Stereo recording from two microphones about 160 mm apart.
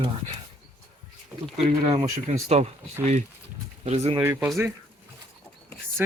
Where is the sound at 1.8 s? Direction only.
35° right (ahead or behind).